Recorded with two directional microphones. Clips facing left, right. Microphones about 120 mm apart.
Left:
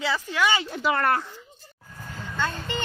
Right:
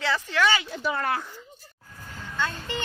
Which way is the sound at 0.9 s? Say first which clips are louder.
Left 4 dB; 70° left (ahead or behind).